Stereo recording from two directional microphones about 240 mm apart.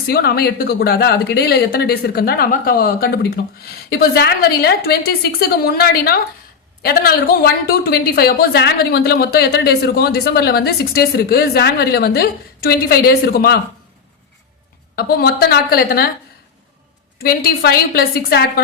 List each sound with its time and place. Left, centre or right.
0.1 s a woman's voice: left
14.9 s a woman's voice: left
17.2 s a woman's voice: left